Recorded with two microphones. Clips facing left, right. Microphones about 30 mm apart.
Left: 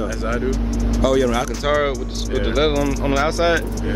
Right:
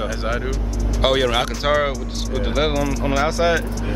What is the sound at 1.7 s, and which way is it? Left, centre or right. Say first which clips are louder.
Speech: left 1 dB; centre.